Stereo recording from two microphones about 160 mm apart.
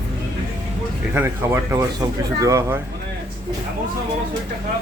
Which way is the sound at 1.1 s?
15° right (ahead or behind).